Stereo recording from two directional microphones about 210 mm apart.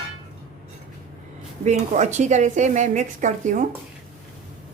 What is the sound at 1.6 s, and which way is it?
A woman's voice, 35° right (ahead or behind).